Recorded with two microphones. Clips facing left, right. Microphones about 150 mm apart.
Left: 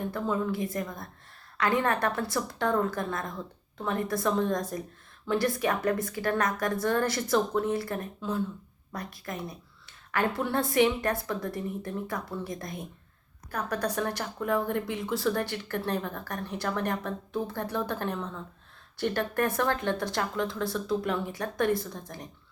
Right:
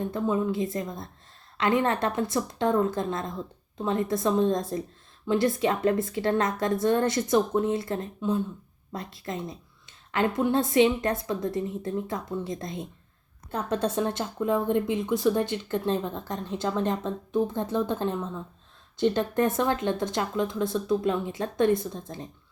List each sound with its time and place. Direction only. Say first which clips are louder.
0.1 s speech: right 3 dB; 20° right (ahead or behind)